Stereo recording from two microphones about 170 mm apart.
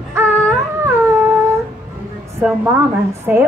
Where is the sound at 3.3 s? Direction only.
10° right (ahead or behind).